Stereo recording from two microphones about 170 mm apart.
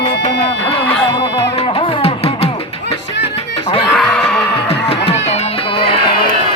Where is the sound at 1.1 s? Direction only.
30° left (ahead or behind).